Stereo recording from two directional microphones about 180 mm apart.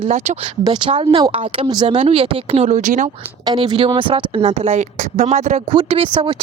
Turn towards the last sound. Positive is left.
turn(degrees=-30)  # may be behind; listen again after turning